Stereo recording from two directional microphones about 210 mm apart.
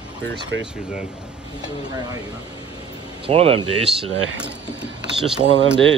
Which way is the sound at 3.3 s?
25° right (ahead or behind).